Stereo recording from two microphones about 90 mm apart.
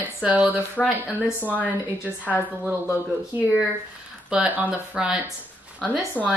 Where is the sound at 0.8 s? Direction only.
10° left (ahead or behind).